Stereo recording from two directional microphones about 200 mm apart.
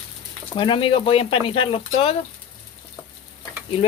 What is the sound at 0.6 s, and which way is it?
Speech, 25° left (ahead or behind).